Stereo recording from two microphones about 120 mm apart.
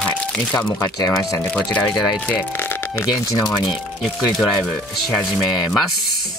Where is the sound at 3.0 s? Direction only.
35° left (ahead or behind).